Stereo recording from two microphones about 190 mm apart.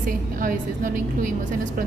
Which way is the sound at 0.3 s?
45° right (ahead or behind).